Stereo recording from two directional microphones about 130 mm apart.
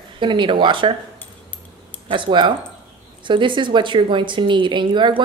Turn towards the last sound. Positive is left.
turn(degrees=-35)  # may be behind; listen again after turning